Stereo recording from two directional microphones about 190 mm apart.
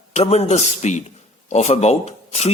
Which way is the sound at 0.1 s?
35° left (ahead or behind).